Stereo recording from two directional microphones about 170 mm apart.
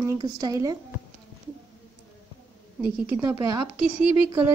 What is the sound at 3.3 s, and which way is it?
Speech, 25° right (ahead or behind).